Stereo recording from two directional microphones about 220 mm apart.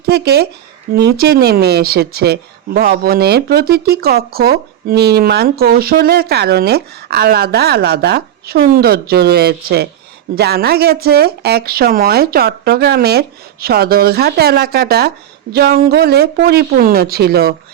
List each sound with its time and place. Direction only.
0.0 s speech: 45° right (ahead or behind)